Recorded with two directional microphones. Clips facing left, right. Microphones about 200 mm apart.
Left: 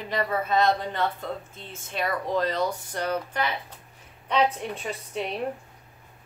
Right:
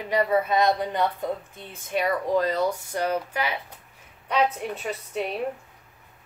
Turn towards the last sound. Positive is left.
turn(degrees=-5)  # may be behind; listen again after turning